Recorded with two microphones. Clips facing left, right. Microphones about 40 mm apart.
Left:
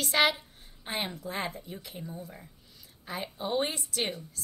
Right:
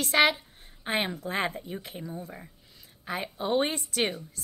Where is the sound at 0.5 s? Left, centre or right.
Right.